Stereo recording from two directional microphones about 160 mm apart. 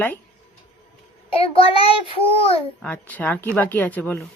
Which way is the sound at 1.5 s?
35° left (ahead or behind).